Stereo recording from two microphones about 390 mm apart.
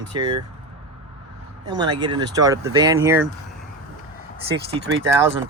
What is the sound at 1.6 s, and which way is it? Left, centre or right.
Speech, centre.